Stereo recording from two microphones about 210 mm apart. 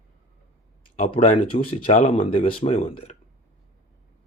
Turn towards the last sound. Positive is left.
turn(degrees=25)  # may be behind; listen again after turning